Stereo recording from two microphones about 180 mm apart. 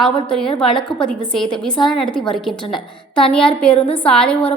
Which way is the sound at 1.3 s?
5° left (ahead or behind).